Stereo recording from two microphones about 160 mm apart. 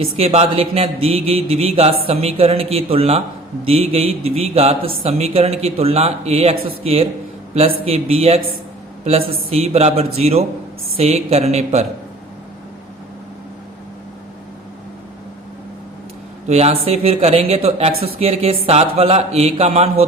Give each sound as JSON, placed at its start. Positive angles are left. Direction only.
{"t": 0.0, "sound": "a man's voice", "side_deg": -40}
{"t": 16.5, "sound": "a man's voice", "side_deg": -40}